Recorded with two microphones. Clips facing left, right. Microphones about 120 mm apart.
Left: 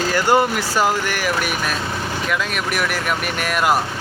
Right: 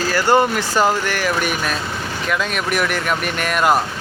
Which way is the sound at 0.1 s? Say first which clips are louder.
Right 2 dB; 10° left (ahead or behind).